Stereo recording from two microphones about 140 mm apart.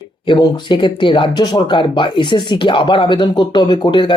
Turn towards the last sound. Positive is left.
turn(degrees=35)  # may be behind; listen again after turning